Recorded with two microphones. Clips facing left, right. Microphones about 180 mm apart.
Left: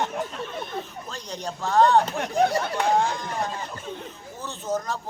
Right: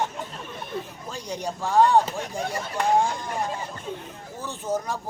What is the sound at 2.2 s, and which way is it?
Speech, 65° left (ahead or behind).